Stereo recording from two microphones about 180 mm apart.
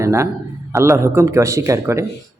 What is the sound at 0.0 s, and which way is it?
Speech, 15° right (ahead or behind).